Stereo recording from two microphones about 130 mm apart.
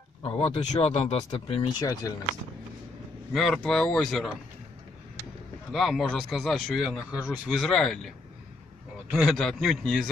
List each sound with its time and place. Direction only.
0.4 s speech: 55° left (ahead or behind)
1.8 s speech: 25° left (ahead or behind)
3.3 s speech: centre (ahead or behind)
5.7 s speech: centre (ahead or behind)
9.1 s speech: 5° right (ahead or behind)